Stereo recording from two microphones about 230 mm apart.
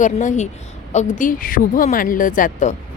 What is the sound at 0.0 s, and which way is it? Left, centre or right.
Speech, left.